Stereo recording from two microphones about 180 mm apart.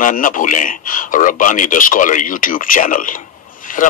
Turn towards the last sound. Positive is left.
turn(degrees=50)  # may be behind; listen again after turning